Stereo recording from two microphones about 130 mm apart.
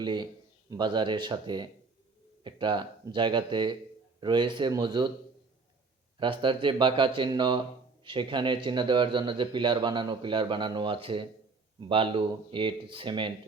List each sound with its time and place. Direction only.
0.0 s speech: 35° right (ahead or behind)
6.1 s speech: 40° right (ahead or behind)